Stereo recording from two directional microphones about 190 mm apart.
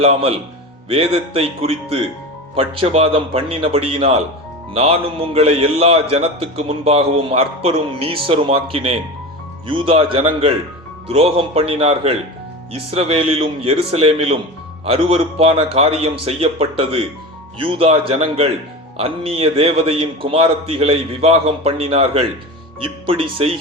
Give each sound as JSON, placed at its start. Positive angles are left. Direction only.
{"t": 0.0, "sound": "a man's voice", "side_deg": -30}